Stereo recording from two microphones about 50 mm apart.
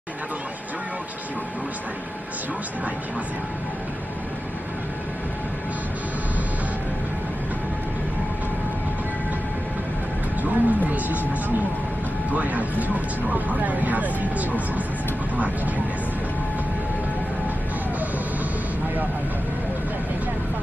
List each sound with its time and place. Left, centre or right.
10.4 s speech: right